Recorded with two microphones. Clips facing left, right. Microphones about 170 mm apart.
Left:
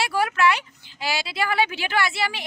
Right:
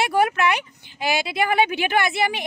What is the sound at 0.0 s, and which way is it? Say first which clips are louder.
Speech: right 2 dB; 20° right (ahead or behind).